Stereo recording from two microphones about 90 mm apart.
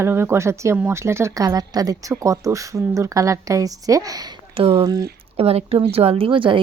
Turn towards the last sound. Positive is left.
turn(degrees=-70)  # may be behind; listen again after turning